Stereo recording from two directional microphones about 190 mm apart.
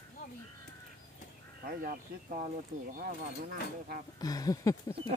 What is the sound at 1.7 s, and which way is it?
Speech, 45° right (ahead or behind).